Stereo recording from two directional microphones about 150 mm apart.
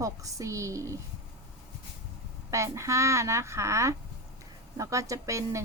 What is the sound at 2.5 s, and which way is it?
Speech, 20° right (ahead or behind).